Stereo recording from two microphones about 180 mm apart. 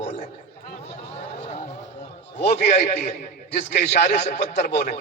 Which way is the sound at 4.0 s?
40° left (ahead or behind).